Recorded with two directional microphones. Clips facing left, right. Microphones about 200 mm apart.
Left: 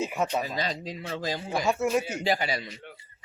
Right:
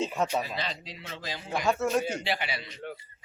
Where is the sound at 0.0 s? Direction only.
5° left (ahead or behind).